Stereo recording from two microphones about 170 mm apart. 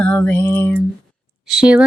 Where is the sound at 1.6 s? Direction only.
5° right (ahead or behind).